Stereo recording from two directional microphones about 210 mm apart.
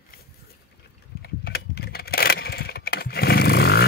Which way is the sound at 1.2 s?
45° left (ahead or behind).